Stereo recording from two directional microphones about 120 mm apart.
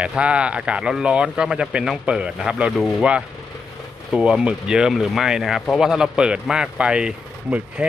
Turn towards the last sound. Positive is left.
turn(degrees=-10)  # may be behind; listen again after turning